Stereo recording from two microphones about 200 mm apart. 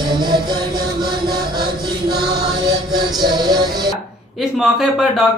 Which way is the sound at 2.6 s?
20° right (ahead or behind).